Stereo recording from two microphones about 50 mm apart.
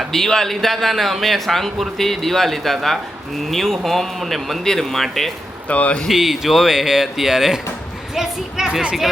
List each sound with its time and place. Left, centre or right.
0.1 s a man's voice: centre
5.6 s speech: left
6.1 s a woman's voice: centre